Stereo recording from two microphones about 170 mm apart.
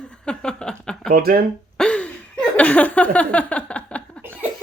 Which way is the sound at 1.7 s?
5° left (ahead or behind).